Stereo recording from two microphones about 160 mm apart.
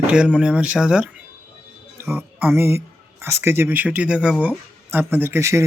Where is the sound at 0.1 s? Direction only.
5° right (ahead or behind).